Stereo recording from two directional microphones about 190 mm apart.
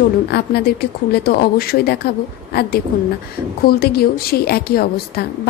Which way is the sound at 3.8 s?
55° left (ahead or behind).